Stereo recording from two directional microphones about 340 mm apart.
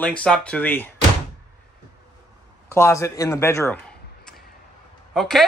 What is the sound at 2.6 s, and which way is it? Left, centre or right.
Speech, centre.